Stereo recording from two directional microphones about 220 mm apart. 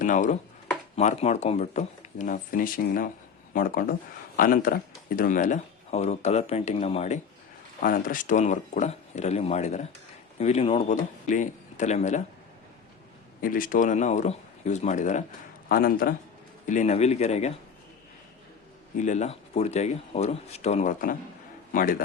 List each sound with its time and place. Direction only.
0.0 s speech: 35° left (ahead or behind)
7.8 s speech: 40° left (ahead or behind)
13.4 s speech: 40° left (ahead or behind)
18.9 s speech: 35° left (ahead or behind)